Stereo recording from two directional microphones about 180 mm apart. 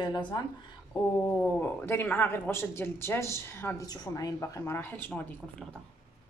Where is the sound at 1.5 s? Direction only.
10° left (ahead or behind).